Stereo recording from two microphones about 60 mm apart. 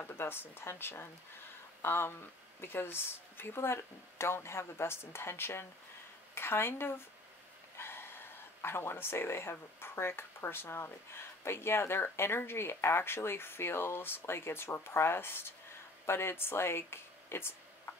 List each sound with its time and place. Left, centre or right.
0.0 s a woman's voice: left
7.7 s a sound: left
8.6 s speech: left